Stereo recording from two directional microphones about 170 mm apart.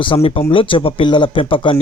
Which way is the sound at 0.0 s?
30° left (ahead or behind).